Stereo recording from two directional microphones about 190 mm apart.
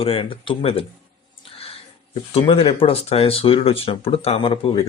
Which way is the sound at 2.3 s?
30° left (ahead or behind).